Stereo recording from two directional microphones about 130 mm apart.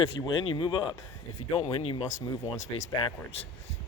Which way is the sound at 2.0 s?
25° left (ahead or behind).